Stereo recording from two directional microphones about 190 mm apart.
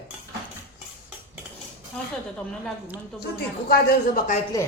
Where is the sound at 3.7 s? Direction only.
50° left (ahead or behind).